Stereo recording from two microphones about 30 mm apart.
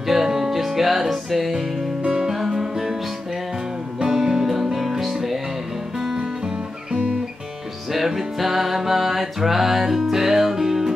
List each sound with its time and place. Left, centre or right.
0.0 s music: centre
4.0 s music: centre
6.1 s music: right
7.9 s music: centre